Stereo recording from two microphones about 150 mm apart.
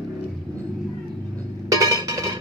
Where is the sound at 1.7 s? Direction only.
25° right (ahead or behind).